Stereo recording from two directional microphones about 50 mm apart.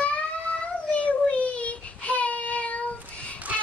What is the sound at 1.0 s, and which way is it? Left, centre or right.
Child singing, left.